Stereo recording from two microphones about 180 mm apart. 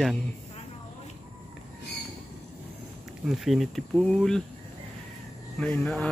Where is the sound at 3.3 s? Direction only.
Centre (ahead or behind).